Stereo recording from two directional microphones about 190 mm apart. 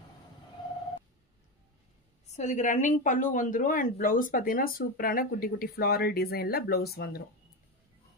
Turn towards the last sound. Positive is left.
turn(degrees=55)  # may be behind; listen again after turning